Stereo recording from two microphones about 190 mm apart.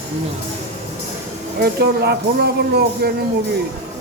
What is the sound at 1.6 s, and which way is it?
Speech, 60° right (ahead or behind).